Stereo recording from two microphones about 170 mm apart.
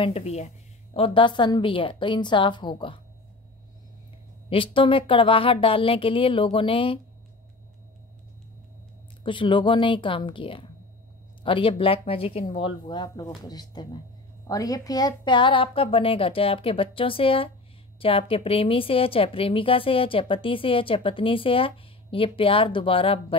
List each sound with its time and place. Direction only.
0.0 s a woman's voice: 35° left (ahead or behind)
4.5 s a woman's voice: 30° left (ahead or behind)
9.2 s a woman's voice: 30° left (ahead or behind)